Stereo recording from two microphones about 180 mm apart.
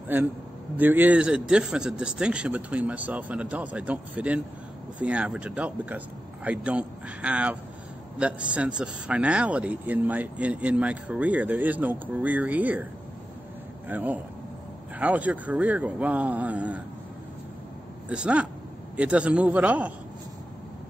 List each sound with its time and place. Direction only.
0.7 s speech: 10° right (ahead or behind)
13.8 s speech: 10° right (ahead or behind)
18.0 s speech: 5° right (ahead or behind)